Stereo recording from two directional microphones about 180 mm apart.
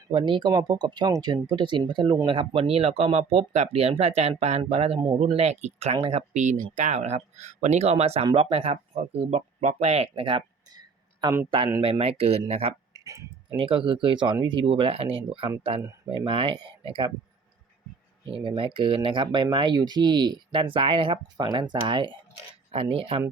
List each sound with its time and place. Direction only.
0.1 s speech: 25° right (ahead or behind)
11.8 s speech: 30° right (ahead or behind)
12.9 s a sound: 20° right (ahead or behind)
13.6 s speech: 30° right (ahead or behind)
18.3 s speech: 30° right (ahead or behind)